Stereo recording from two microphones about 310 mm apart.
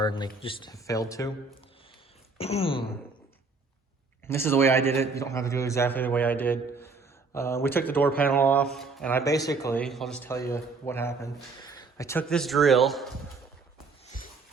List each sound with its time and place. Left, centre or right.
0.0 s speech: centre
2.4 s a sound: centre
4.3 s speech: centre